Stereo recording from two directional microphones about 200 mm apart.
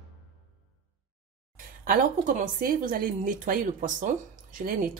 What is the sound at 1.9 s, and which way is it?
A woman's voice, 40° right (ahead or behind).